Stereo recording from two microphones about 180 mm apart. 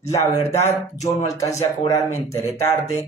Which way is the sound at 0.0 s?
15° left (ahead or behind).